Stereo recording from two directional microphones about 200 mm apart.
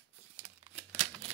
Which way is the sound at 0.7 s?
30° right (ahead or behind).